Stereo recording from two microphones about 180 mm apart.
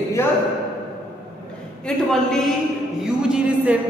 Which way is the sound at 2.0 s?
Centre (ahead or behind).